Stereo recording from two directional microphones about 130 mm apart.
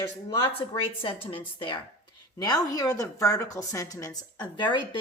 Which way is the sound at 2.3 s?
30° left (ahead or behind).